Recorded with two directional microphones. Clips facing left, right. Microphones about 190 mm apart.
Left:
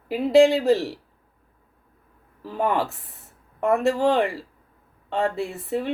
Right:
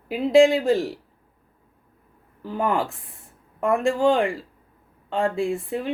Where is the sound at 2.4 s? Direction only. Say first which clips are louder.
Even; centre (ahead or behind).